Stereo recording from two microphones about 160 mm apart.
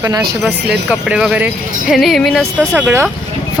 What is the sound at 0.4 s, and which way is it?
Speech, centre (ahead or behind).